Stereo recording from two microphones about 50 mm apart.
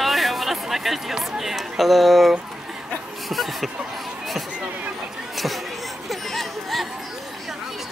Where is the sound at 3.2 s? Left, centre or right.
Centre.